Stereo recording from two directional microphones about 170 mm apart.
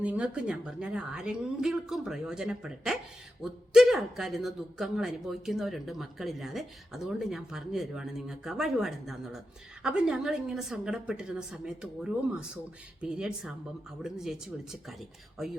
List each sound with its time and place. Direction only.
0.0 s speech: 10° right (ahead or behind)